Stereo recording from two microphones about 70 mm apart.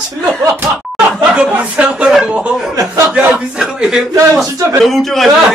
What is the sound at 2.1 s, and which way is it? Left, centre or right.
Speech, centre.